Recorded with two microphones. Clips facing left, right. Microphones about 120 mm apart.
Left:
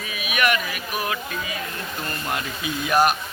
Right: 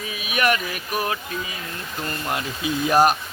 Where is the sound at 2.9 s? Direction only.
35° right (ahead or behind).